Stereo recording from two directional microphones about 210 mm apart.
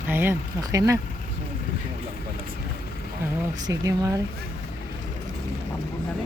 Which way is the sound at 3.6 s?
15° right (ahead or behind).